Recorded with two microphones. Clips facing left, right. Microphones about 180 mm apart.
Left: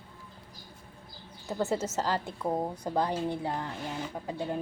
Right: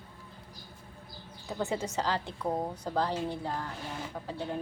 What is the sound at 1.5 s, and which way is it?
A woman's voice, 5° left (ahead or behind).